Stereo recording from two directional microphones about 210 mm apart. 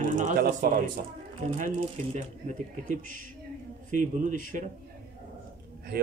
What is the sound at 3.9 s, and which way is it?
Speech, 40° right (ahead or behind).